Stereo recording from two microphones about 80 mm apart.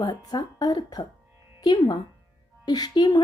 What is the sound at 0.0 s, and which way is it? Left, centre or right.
A woman's voice, left.